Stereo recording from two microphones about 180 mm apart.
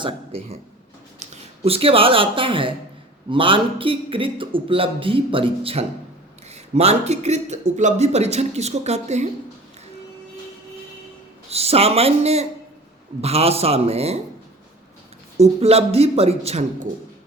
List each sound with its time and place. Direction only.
0.0 s speech: 30° right (ahead or behind)
1.6 s a man's voice: 30° right (ahead or behind)
11.5 s speech: 35° right (ahead or behind)
15.4 s speech: 35° right (ahead or behind)